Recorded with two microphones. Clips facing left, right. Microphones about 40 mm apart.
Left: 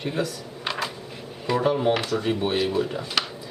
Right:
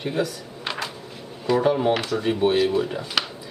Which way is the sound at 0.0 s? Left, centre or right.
Centre.